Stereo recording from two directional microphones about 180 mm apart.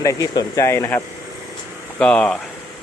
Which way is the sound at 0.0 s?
20° left (ahead or behind).